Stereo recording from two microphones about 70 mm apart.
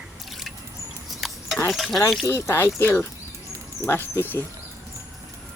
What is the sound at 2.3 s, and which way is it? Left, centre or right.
Speech, left.